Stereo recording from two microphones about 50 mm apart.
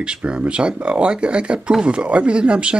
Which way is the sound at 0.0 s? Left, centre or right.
Centre.